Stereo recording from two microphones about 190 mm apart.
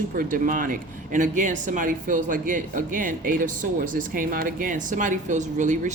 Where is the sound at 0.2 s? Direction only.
45° right (ahead or behind).